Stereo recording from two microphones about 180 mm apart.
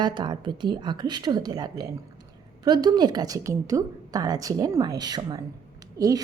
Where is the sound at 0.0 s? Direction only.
25° right (ahead or behind).